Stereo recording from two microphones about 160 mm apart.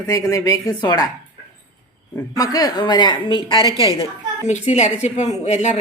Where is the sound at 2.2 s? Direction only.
20° left (ahead or behind).